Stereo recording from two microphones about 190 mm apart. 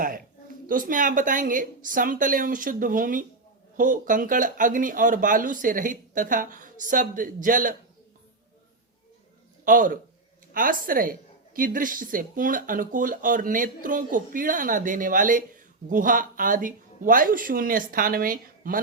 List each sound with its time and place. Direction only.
0.7 s a woman's voice: 45° right (ahead or behind)
9.6 s a woman's voice: 45° right (ahead or behind)